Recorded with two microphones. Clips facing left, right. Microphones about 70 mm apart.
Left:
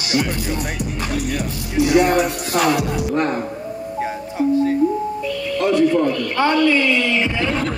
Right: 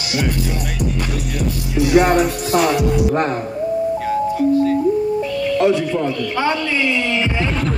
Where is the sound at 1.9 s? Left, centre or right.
Right.